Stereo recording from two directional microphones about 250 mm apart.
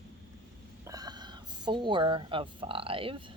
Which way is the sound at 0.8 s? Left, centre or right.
Centre.